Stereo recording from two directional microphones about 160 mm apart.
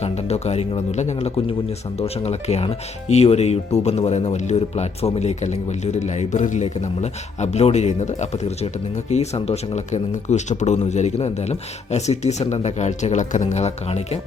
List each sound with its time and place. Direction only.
0.0 s speech: 40° left (ahead or behind)